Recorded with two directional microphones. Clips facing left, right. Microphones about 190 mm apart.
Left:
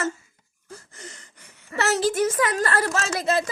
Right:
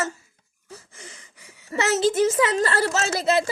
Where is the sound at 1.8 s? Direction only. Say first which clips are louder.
Right 2 dB; 25° right (ahead or behind).